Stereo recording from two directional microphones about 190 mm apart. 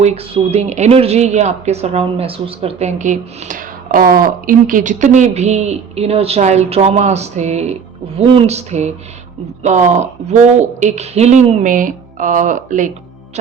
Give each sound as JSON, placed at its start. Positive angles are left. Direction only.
{"t": 0.0, "sound": "speech", "side_deg": -35}